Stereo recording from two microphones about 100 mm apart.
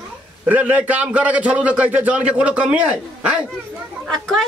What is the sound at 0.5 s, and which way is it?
A man's voice, 15° right (ahead or behind).